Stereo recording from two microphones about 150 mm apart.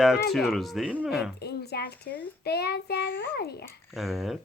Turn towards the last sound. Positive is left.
turn(degrees=0)  # may be behind; listen again after turning